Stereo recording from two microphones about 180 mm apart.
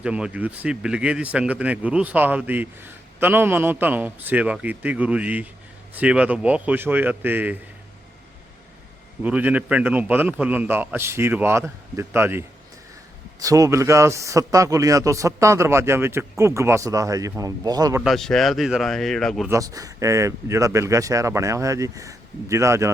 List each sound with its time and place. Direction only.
0.0 s speech: 5° right (ahead or behind)
9.2 s speech: 10° right (ahead or behind)
18.0 s speech: centre (ahead or behind)
19.5 s speech: 20° right (ahead or behind)